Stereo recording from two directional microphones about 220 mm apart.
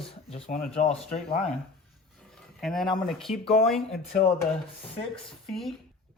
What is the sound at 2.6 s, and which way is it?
Speech, centre (ahead or behind).